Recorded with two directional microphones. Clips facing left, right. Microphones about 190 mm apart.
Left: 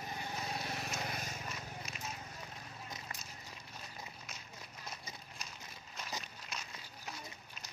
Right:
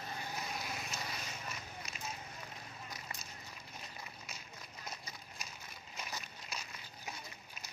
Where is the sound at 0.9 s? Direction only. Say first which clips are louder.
Left 3 dB; 50° left (ahead or behind).